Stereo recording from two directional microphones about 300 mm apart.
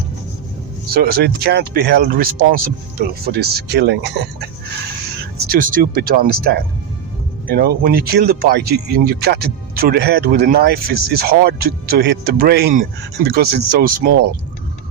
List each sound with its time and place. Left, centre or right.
0.9 s speech: right
5.5 s speech: right